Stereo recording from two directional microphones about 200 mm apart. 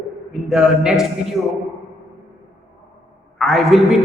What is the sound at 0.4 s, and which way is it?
Speech, 5° right (ahead or behind).